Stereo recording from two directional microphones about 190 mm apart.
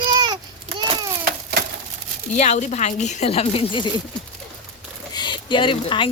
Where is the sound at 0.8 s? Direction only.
25° right (ahead or behind).